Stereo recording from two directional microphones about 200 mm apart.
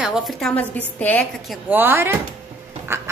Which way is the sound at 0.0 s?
5° right (ahead or behind).